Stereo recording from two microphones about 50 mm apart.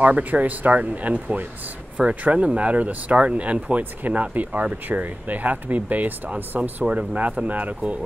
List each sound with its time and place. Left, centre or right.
0.0 s speech: right